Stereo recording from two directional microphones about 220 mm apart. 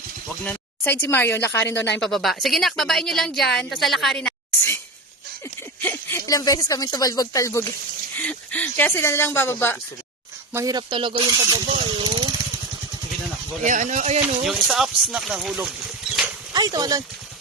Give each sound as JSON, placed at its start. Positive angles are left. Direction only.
{"t": 0.4, "sound": "a woman's voice", "side_deg": 10}
{"t": 5.8, "sound": "speech", "side_deg": 10}
{"t": 10.5, "sound": "speech", "side_deg": -15}
{"t": 13.7, "sound": "speech", "side_deg": -35}
{"t": 14.4, "sound": "a woman's voice", "side_deg": 0}
{"t": 16.5, "sound": "speech", "side_deg": -15}